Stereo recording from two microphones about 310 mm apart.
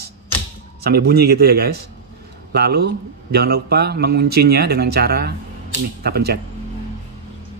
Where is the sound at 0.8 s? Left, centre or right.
Right.